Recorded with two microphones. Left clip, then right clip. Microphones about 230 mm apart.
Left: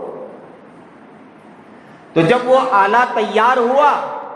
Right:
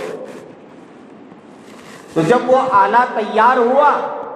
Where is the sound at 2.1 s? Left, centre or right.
Left.